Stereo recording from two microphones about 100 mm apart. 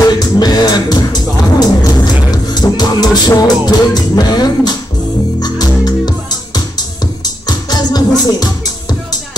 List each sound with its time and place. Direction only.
0.0 s music: 45° left (ahead or behind)